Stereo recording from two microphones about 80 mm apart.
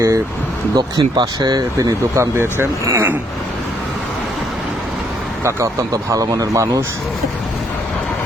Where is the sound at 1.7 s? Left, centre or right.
Right.